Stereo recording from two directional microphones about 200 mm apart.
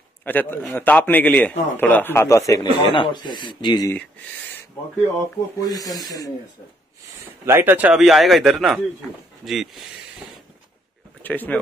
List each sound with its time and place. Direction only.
0.2 s a man's voice: 10° left (ahead or behind)
2.8 s speech: 25° left (ahead or behind)
5.6 s a man's voice: 20° left (ahead or behind)
7.4 s a man's voice: 10° right (ahead or behind)
11.2 s a man's voice: 10° left (ahead or behind)